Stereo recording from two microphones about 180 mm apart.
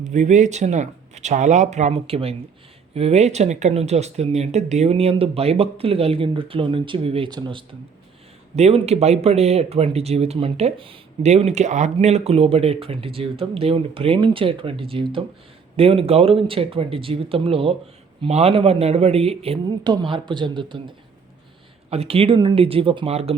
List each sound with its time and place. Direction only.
0.0 s speech: 40° right (ahead or behind); by 7.6 s 25° right (ahead or behind)
8.5 s speech: 35° right (ahead or behind)